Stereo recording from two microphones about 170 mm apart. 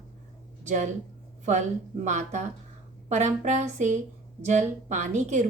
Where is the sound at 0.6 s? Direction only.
45° right (ahead or behind).